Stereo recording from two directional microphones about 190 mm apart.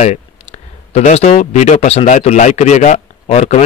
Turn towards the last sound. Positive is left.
turn(degrees=35)  # may be behind; listen again after turning